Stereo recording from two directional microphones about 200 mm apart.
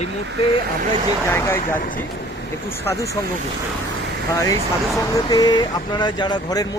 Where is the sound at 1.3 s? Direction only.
10° left (ahead or behind).